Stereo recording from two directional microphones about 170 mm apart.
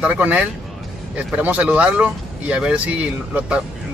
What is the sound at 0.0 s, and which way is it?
Speech, 10° right (ahead or behind).